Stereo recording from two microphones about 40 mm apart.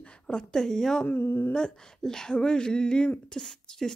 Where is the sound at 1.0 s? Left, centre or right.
Left.